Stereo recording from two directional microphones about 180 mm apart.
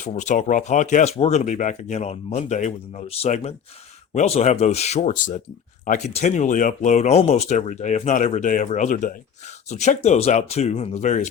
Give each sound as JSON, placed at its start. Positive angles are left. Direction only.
{"t": 0.0, "sound": "speech", "side_deg": 40}